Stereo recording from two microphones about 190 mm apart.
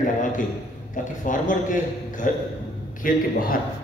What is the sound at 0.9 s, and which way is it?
A man's voice, 45° left (ahead or behind).